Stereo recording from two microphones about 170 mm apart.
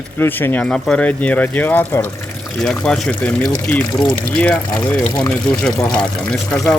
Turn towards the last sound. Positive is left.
turn(degrees=5)  # may be behind; listen again after turning